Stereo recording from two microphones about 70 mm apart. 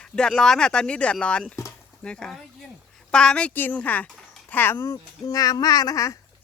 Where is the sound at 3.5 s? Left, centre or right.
Left.